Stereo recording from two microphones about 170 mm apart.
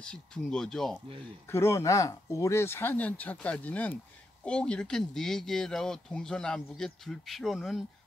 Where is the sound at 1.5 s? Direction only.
15° left (ahead or behind).